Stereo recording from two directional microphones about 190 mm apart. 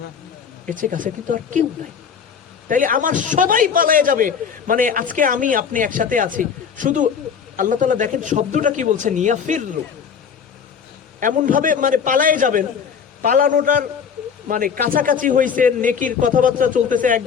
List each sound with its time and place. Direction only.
0.6 s a man's voice: 45° right (ahead or behind)
2.6 s a man's voice: 45° right (ahead or behind)
11.2 s a man's voice: 45° right (ahead or behind)